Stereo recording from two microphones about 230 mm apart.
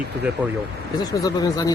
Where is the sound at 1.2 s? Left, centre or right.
Centre.